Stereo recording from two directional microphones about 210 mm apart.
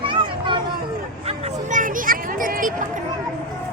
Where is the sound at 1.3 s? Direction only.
40° right (ahead or behind).